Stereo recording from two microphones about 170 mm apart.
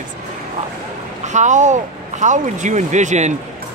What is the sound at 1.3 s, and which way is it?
Speech, 45° right (ahead or behind).